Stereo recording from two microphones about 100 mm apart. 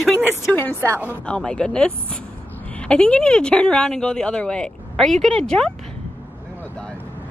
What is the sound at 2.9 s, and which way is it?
Speech, 10° left (ahead or behind).